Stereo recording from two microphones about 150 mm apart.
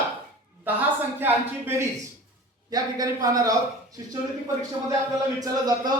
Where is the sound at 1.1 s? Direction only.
15° right (ahead or behind).